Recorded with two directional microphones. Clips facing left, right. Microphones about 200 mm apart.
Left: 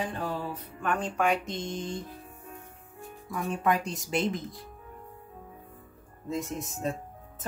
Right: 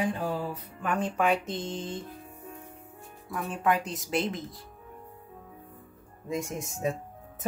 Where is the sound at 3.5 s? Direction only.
Centre (ahead or behind).